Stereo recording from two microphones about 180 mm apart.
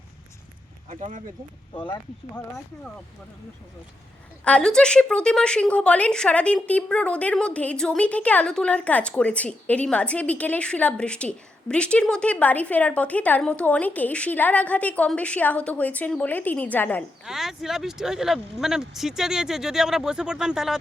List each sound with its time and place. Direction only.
0.9 s speech: 40° right (ahead or behind)
1.7 s speech: 25° left (ahead or behind)
4.4 s a woman's voice: 5° left (ahead or behind)
17.2 s speech: centre (ahead or behind)